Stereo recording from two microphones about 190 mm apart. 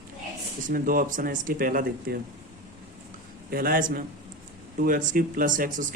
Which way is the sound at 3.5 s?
50° right (ahead or behind).